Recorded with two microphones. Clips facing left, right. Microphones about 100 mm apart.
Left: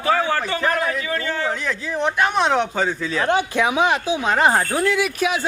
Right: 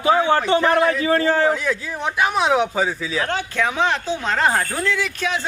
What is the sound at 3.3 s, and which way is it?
Speech, 15° left (ahead or behind).